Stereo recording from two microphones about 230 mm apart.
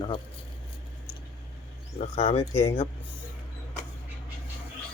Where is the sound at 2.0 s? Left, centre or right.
Left.